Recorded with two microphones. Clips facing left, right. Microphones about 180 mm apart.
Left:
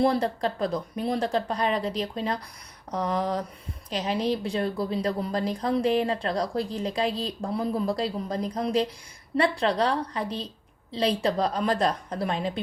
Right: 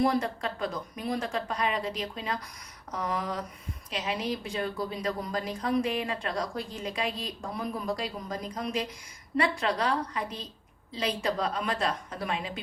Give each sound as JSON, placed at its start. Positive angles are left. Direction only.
{"t": 0.0, "sound": "a woman's voice", "side_deg": 30}